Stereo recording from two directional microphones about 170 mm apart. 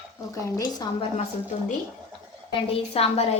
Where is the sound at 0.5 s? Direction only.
25° left (ahead or behind).